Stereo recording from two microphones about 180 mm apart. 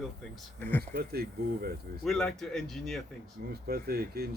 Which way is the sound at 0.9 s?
60° right (ahead or behind).